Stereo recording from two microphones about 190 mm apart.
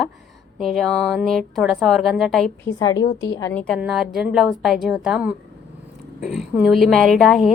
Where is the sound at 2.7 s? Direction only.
20° left (ahead or behind).